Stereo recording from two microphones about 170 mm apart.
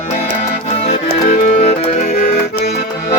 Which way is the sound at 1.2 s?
50° left (ahead or behind).